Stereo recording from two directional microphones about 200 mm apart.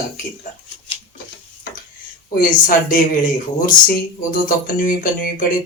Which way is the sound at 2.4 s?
45° left (ahead or behind).